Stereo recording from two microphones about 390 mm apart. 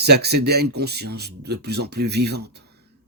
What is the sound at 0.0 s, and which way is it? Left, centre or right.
Speech, right.